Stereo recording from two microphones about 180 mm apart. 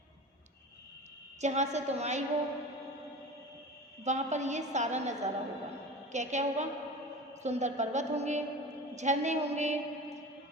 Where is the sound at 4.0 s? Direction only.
40° right (ahead or behind).